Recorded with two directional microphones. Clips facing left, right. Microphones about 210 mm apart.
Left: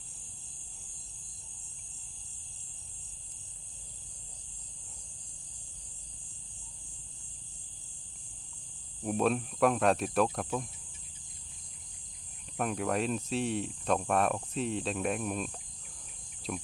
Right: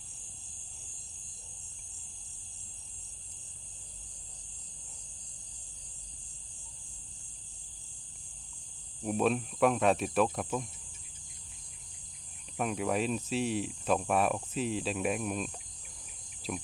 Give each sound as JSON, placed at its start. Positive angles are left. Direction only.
{"t": 9.0, "sound": "cricket", "side_deg": 0}
{"t": 12.5, "sound": "cricket", "side_deg": 0}